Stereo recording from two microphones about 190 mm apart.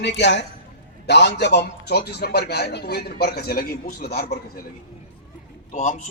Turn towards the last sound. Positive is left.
turn(degrees=40)  # may be behind; listen again after turning